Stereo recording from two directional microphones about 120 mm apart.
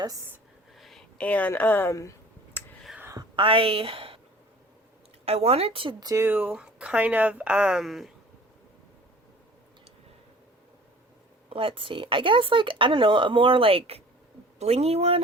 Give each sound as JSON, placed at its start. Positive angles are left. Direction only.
{"t": 0.8, "sound": "a sound", "side_deg": 0}
{"t": 1.2, "sound": "a woman's voice", "side_deg": 10}
{"t": 2.0, "sound": "a sound", "side_deg": 25}
{"t": 3.2, "sound": "a woman's voice", "side_deg": -45}
{"t": 5.2, "sound": "speech", "side_deg": -55}
{"t": 6.0, "sound": "speech", "side_deg": -30}
{"t": 6.2, "sound": "speech", "side_deg": -15}
{"t": 11.4, "sound": "speech", "side_deg": -45}